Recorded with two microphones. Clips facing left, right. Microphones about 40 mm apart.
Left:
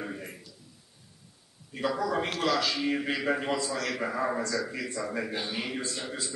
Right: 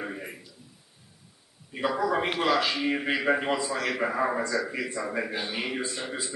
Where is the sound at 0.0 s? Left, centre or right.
Centre.